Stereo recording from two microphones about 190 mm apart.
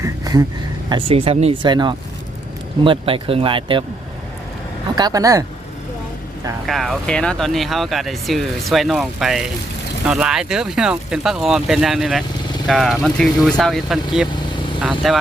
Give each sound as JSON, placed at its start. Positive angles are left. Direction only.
{"t": 0.0, "sound": "a sound", "side_deg": -20}
{"t": 0.9, "sound": "speech", "side_deg": -30}
{"t": 4.9, "sound": "speech", "side_deg": -20}
{"t": 6.7, "sound": "speech", "side_deg": 0}